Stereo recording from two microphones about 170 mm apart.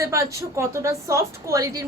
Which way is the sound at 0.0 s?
15° right (ahead or behind).